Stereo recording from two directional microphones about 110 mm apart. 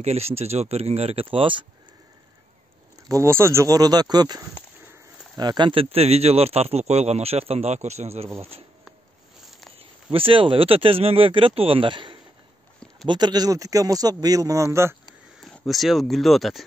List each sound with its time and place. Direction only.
0.0 s speech: 70° right (ahead or behind); by 1.7 s 50° right (ahead or behind)
3.1 s speech: 25° right (ahead or behind); by 8.3 s 80° right
8.4 s speech: 65° right (ahead or behind)
10.1 s speech: 55° right (ahead or behind)
13.1 s speech: 40° right (ahead or behind)
15.4 s speech: centre (ahead or behind)